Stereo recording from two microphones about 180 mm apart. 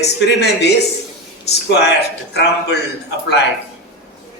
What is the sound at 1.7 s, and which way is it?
A man's voice, 65° left (ahead or behind).